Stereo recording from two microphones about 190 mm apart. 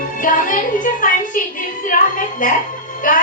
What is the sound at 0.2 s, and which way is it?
A woman's voice, 45° left (ahead or behind).